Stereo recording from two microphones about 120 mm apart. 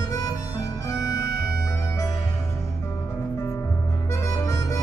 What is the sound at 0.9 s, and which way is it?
Music, 30° left (ahead or behind).